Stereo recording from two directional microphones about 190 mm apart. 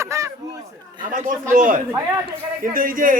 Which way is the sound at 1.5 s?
45° right (ahead or behind).